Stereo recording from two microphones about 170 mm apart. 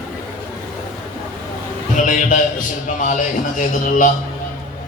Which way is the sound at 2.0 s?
50° left (ahead or behind).